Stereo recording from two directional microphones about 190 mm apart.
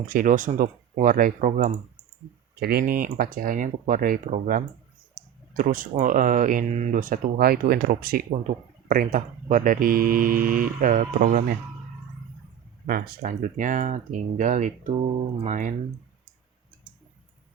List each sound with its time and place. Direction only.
0.0 s speech: 45° right (ahead or behind)
2.6 s speech: 55° right (ahead or behind)
5.2 s a sound: 55° right (ahead or behind)
5.5 s speech: 45° right (ahead or behind)
12.8 s speech: 45° right (ahead or behind)